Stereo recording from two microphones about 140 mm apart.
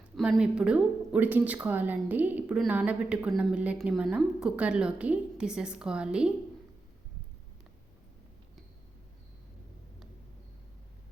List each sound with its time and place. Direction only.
0.2 s a woman's voice: 5° right (ahead or behind)